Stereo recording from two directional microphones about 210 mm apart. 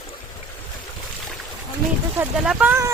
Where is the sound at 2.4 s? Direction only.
5° right (ahead or behind).